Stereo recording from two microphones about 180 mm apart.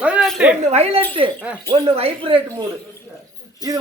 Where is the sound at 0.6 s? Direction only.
35° right (ahead or behind).